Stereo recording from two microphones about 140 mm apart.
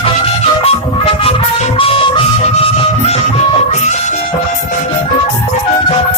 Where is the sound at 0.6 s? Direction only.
45° left (ahead or behind).